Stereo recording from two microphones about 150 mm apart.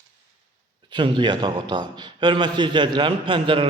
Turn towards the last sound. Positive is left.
turn(degrees=-35)  # may be behind; listen again after turning